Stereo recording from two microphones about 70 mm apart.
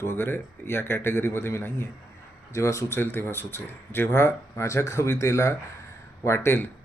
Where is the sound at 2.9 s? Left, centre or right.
Left.